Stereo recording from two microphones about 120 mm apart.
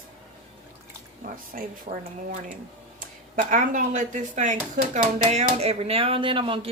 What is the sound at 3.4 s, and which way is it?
Speech, 90° right.